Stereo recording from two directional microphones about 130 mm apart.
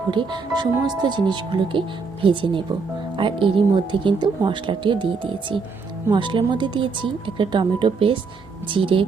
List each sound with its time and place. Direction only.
0.1 s speech: 35° right (ahead or behind)